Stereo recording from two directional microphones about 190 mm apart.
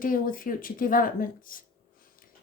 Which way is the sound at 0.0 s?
45° left (ahead or behind).